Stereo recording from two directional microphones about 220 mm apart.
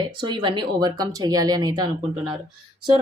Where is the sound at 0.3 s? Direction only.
20° right (ahead or behind).